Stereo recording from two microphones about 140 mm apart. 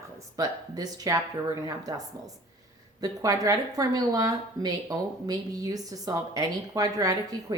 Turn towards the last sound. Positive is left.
turn(degrees=-25)  # may be behind; listen again after turning